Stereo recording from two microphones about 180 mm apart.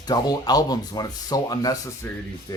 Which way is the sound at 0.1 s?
20° left (ahead or behind).